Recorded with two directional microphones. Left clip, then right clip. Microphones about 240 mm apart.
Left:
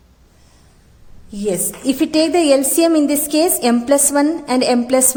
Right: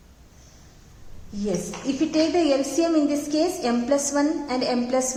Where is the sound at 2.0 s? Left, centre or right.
Left.